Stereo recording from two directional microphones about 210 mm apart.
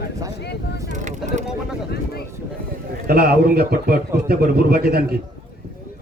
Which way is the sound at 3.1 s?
50° right (ahead or behind).